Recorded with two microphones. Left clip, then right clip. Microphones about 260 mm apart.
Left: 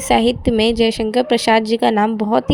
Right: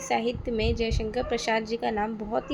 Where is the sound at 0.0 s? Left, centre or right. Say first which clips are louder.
Left 12 dB; left.